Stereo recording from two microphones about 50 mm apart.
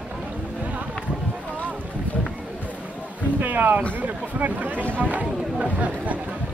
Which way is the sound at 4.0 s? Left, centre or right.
Right.